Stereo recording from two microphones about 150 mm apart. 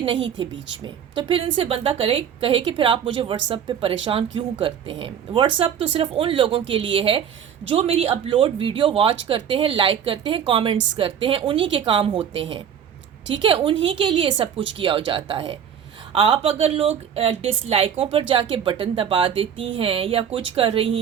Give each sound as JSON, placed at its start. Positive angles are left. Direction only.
{"t": 0.0, "sound": "speech", "side_deg": -35}